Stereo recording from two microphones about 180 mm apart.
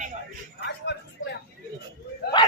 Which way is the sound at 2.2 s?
60° left (ahead or behind).